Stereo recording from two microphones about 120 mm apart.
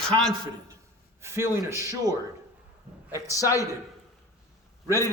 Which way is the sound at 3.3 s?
30° left (ahead or behind).